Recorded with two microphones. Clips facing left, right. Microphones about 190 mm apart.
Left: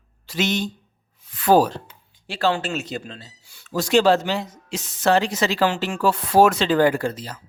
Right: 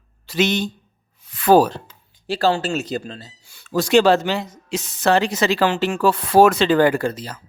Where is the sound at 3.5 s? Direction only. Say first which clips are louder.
Right 3 dB; 70° right (ahead or behind).